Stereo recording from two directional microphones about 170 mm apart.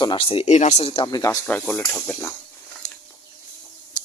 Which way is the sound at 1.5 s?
5° left (ahead or behind).